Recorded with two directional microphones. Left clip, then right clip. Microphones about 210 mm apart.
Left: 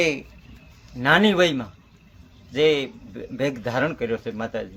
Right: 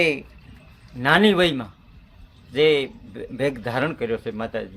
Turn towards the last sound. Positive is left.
turn(degrees=-15)  # may be behind; listen again after turning